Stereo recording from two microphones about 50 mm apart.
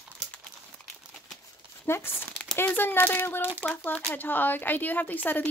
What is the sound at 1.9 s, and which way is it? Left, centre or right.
Speech, left.